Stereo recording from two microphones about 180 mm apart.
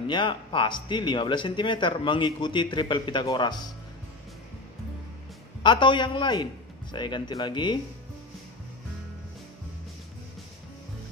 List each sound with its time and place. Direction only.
0.1 s speech: 25° left (ahead or behind)
5.6 s speech: 25° left (ahead or behind)